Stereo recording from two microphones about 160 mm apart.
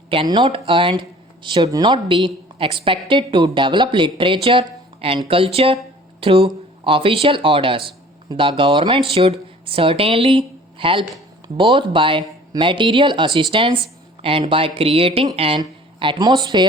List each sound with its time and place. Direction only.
0.1 s speech: 30° right (ahead or behind)